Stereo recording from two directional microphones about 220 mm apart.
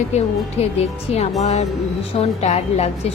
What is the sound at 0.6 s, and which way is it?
Speech, 30° left (ahead or behind).